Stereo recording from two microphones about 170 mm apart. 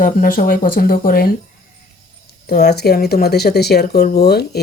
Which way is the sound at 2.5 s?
70° left (ahead or behind).